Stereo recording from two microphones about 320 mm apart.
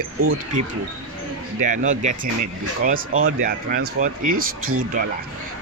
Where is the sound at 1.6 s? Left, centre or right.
Right.